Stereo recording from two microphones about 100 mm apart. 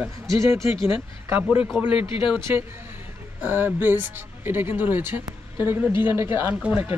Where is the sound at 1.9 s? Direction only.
60° left (ahead or behind).